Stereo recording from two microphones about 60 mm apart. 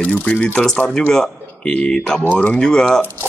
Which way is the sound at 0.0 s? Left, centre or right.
Left.